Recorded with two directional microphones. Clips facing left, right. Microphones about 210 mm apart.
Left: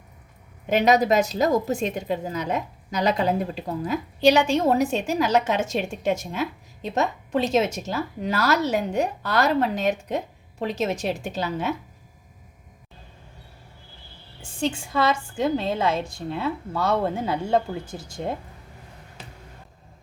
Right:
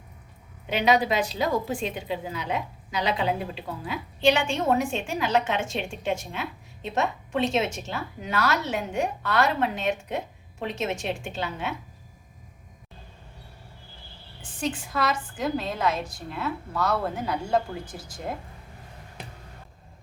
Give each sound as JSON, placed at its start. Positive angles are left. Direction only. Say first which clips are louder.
{"t": 0.7, "sound": "a woman's voice", "louder": "left 4 dB", "side_deg": 45}
{"t": 14.6, "sound": "a woman's voice", "louder": "left 4 dB", "side_deg": 25}